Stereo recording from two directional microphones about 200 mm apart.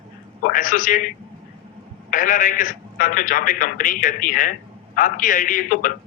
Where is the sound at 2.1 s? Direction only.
40° left (ahead or behind).